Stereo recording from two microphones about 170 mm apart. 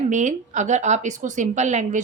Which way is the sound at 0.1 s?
45° right (ahead or behind).